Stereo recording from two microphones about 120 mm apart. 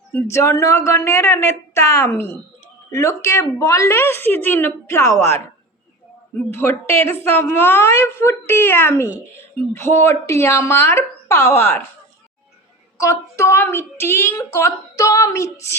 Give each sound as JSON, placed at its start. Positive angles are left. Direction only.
{"t": 0.1, "sound": "a woman's voice", "side_deg": 20}
{"t": 6.5, "sound": "a woman's voice", "side_deg": 20}
{"t": 13.0, "sound": "a woman's voice", "side_deg": 25}